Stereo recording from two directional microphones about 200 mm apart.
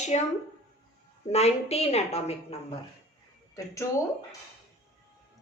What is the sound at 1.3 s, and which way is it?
A woman's voice, 30° left (ahead or behind).